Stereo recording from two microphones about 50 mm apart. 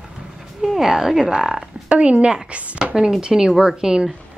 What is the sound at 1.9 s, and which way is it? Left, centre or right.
Speech, right.